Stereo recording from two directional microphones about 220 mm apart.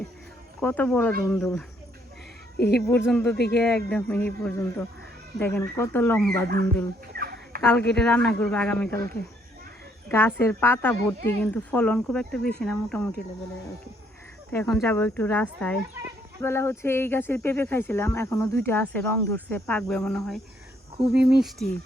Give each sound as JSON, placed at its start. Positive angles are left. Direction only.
{"t": 0.6, "sound": "speech", "side_deg": 5}
{"t": 2.6, "sound": "speech", "side_deg": 50}
{"t": 2.9, "sound": "speech", "side_deg": 5}
{"t": 3.3, "sound": "speech", "side_deg": 50}
{"t": 3.6, "sound": "speech", "side_deg": 5}
{"t": 7.1, "sound": "fowl", "side_deg": -45}
{"t": 7.7, "sound": "speech", "side_deg": 5}
{"t": 14.5, "sound": "speech", "side_deg": 5}